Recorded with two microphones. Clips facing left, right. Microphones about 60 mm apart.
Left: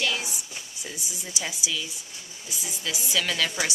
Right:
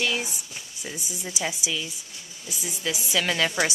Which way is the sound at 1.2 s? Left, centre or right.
Centre.